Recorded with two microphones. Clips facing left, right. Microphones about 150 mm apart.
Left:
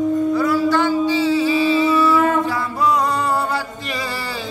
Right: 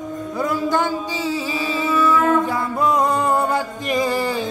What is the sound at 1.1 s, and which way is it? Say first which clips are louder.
Music: left 7 dB; 40° right (ahead or behind).